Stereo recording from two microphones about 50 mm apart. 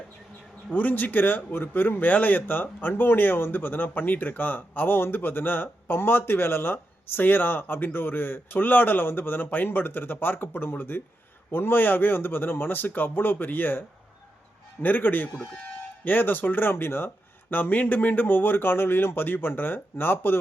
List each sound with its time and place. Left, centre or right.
0.7 s a man's voice: left
17.5 s speech: left